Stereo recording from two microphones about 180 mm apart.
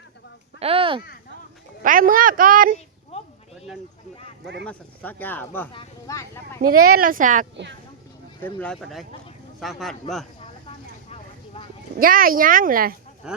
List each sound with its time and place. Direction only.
0.6 s a sound: 30° right (ahead or behind)
1.8 s speech: 50° right (ahead or behind)
4.6 s speech: 10° left (ahead or behind)
6.6 s speech: 50° right (ahead or behind)
8.4 s speech: 5° left (ahead or behind)
11.6 s a sound: 30° left (ahead or behind)
11.9 s speech: 50° right (ahead or behind)
13.2 s speech: 5° right (ahead or behind)